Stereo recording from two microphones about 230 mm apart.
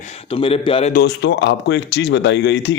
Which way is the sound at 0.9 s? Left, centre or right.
Left.